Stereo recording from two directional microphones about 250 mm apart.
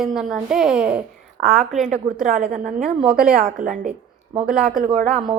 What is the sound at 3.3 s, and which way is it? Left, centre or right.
Speech, right.